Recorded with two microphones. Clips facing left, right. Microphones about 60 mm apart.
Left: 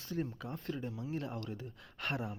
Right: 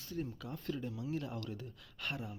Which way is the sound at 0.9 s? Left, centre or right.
Left.